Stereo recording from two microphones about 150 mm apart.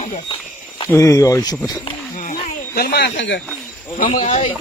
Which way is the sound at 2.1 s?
60° left (ahead or behind).